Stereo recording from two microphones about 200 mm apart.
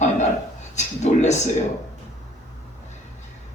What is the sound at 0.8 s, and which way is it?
Speech, 35° left (ahead or behind).